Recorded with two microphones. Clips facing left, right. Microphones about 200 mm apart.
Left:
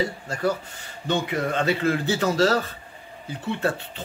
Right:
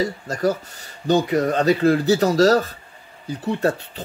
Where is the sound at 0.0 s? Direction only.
40° right (ahead or behind).